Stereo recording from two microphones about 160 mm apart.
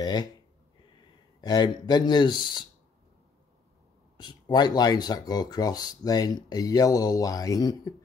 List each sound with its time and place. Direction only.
0.0 s speech: 25° left (ahead or behind)
1.4 s speech: 25° left (ahead or behind)
4.2 s speech: 25° left (ahead or behind)